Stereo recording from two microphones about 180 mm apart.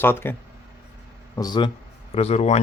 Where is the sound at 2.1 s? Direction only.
35° left (ahead or behind).